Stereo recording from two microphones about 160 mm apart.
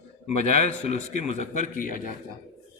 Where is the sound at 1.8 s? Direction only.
55° left (ahead or behind).